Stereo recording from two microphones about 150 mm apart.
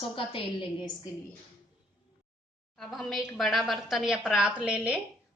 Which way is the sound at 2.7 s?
Centre (ahead or behind).